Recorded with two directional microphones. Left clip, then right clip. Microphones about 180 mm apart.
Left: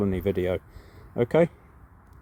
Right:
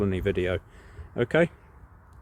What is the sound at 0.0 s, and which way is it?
Speech, 5° left (ahead or behind).